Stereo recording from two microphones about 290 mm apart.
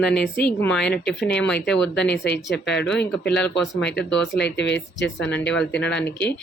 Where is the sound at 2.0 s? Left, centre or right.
Left.